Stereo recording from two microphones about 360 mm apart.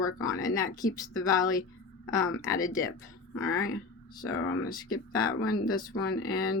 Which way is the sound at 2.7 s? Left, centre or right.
Centre.